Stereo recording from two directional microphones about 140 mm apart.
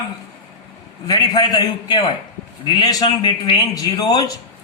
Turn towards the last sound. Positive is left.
turn(degrees=25)  # may be behind; listen again after turning